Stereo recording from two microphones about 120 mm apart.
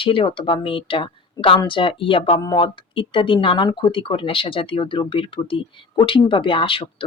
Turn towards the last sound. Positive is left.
turn(degrees=45)  # may be behind; listen again after turning